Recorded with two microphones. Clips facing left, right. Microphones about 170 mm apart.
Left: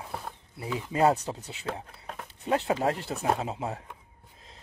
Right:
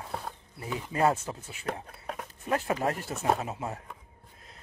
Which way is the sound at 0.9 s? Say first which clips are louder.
Left 2 dB; 20° left (ahead or behind).